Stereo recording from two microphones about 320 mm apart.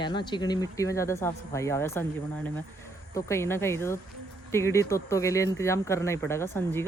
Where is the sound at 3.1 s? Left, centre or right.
Centre.